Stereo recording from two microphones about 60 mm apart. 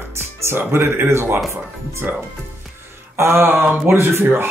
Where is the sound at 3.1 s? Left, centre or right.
Right.